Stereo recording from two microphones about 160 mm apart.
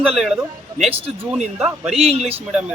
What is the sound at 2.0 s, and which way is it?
Speech, 40° right (ahead or behind).